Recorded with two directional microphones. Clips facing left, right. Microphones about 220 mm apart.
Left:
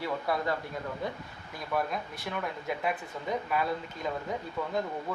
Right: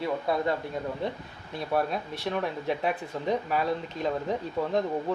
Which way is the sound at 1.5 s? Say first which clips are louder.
Right 4 dB; 30° right (ahead or behind).